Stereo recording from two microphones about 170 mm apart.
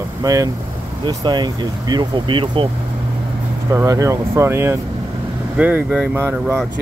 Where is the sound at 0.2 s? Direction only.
20° right (ahead or behind).